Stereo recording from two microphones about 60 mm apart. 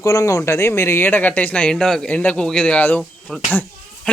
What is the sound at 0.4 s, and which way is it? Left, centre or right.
Speech, left.